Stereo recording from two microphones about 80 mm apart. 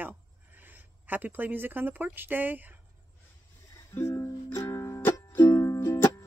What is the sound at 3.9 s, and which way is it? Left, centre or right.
Music, left.